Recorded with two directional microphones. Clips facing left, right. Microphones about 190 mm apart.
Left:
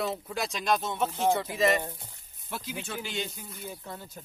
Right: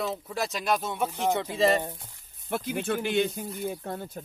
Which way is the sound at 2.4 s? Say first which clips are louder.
Right 8 dB; 55° right (ahead or behind).